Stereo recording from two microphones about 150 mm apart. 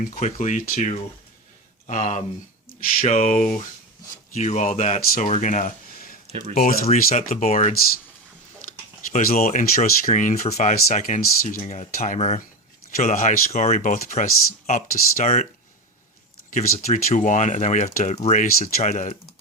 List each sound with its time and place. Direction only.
0.0 s speech: 70° left (ahead or behind)
0.3 s speech: 50° left (ahead or behind)
6.5 s speech: 70° left (ahead or behind)
6.8 s speech: 45° left (ahead or behind)
9.1 s speech: 70° left (ahead or behind)
9.4 s speech: 50° left (ahead or behind)
16.5 s speech: 60° left (ahead or behind)